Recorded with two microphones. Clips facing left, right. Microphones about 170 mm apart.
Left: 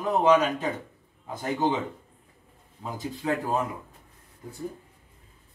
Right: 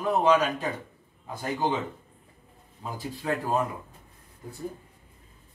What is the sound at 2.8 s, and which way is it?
Speech, 20° left (ahead or behind).